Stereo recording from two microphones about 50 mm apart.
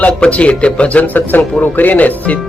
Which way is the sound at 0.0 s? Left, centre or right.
Left.